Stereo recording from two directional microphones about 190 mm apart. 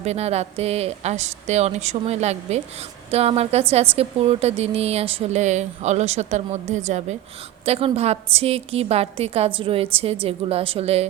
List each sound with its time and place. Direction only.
0.0 s a woman's voice: 35° right (ahead or behind)